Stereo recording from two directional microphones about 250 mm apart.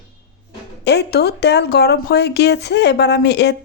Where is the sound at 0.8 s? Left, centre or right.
Left.